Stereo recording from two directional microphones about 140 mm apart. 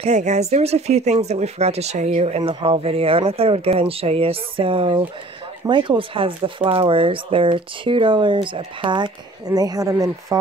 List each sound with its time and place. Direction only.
0.0 s speech: 55° right (ahead or behind); by 10.5 s 25° right (ahead or behind)